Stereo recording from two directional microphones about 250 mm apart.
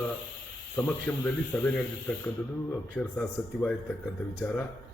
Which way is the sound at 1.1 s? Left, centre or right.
Centre.